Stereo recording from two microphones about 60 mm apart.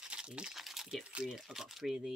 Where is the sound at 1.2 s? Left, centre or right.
Centre.